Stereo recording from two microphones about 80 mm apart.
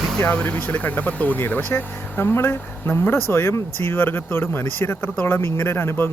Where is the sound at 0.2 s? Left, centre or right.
Left.